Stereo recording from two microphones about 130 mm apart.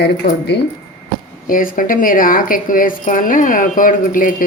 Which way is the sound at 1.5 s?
90° left.